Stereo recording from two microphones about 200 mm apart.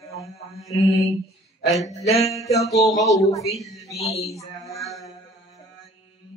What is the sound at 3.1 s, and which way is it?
Speech, 15° left (ahead or behind).